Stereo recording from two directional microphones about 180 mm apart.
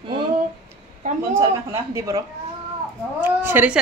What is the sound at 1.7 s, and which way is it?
A woman's voice, 15° right (ahead or behind).